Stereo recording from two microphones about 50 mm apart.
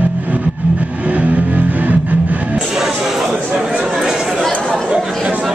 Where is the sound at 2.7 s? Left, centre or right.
Centre.